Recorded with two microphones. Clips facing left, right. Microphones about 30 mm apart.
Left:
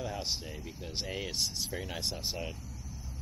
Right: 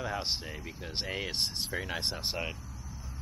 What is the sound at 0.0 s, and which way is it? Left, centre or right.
Speech, centre.